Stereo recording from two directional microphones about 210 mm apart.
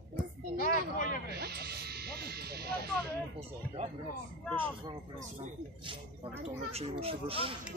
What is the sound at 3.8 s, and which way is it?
Speech, 25° right (ahead or behind).